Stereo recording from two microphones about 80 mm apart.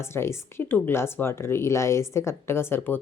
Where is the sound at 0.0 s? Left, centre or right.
Left.